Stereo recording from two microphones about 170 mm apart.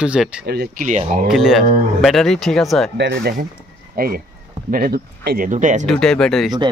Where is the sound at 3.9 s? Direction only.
60° right (ahead or behind).